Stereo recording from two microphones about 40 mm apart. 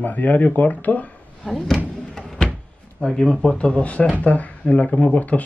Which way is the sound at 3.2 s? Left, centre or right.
Centre.